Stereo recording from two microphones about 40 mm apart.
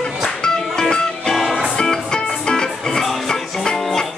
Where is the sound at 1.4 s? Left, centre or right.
Centre.